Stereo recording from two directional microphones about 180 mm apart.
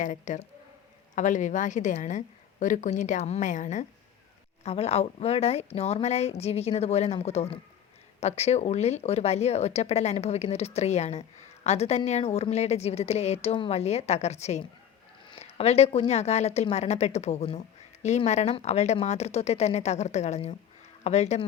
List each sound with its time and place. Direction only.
0.0 s a woman's voice: 45° left (ahead or behind)